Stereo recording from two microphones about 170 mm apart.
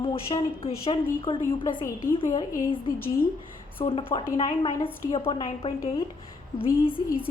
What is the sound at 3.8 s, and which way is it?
Speech, 30° left (ahead or behind).